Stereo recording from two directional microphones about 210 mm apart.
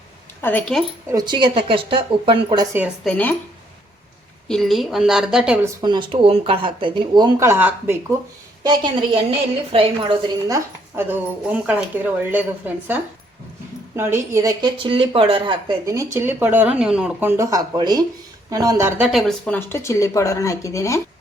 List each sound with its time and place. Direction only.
0.4 s a woman's voice: 5° left (ahead or behind)
1.0 s speech: 20° right (ahead or behind)
2.7 s a woman's voice: 5° right (ahead or behind)
4.4 s a woman's voice: centre (ahead or behind)
5.6 s speech: 20° right (ahead or behind)
8.6 s a woman's voice: 20° right (ahead or behind); by 21.0 s 15° left (ahead or behind)